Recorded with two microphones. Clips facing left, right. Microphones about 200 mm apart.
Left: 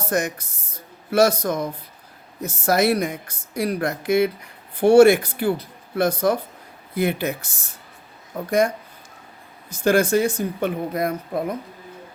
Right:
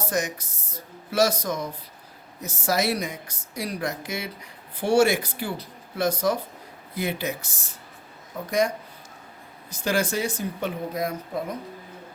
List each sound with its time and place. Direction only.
0.0 s a woman's voice: 55° left (ahead or behind)
9.7 s speech: 55° left (ahead or behind)